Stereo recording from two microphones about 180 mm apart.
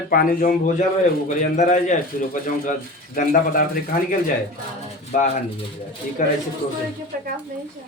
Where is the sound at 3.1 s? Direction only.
50° left (ahead or behind).